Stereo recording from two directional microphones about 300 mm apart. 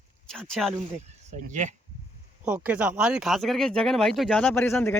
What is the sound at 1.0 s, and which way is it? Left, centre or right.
Speech, right.